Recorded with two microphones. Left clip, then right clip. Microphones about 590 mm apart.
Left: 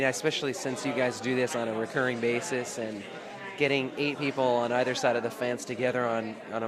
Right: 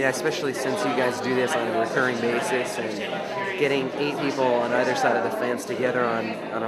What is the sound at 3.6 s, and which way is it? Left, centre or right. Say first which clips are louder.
Speech: right 2 dB; left.